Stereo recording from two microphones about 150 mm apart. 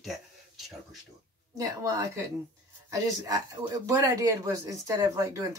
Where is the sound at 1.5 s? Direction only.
25° right (ahead or behind).